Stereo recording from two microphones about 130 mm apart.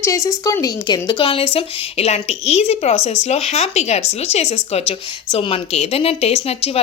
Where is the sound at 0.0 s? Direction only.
25° left (ahead or behind).